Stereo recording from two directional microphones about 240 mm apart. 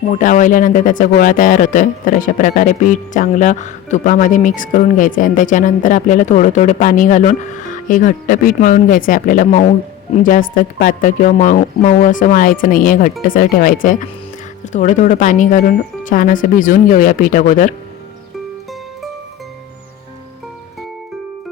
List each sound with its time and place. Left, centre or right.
0.1 s speech: left